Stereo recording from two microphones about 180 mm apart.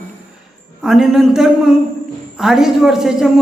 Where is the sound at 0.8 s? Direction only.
Centre (ahead or behind).